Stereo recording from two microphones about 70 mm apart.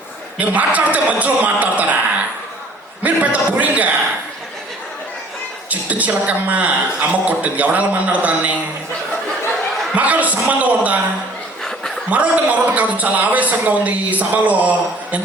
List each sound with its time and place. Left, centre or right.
0.3 s a man's voice: right
3.0 s a man's voice: right
5.9 s a man's voice: right
9.9 s a man's voice: right
12.1 s a man's voice: centre